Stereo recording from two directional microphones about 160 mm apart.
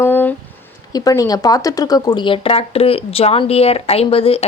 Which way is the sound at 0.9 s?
20° left (ahead or behind).